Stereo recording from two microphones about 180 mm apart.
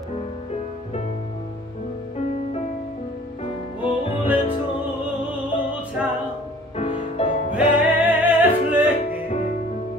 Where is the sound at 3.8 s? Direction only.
30° left (ahead or behind).